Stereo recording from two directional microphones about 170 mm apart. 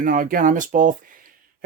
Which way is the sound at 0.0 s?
55° right (ahead or behind).